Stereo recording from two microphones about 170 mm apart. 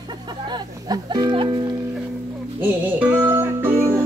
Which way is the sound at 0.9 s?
25° right (ahead or behind).